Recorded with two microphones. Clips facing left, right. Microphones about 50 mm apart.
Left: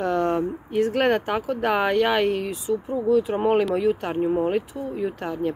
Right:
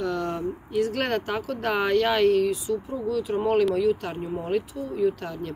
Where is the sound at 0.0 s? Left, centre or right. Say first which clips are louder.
Left 5 dB; left.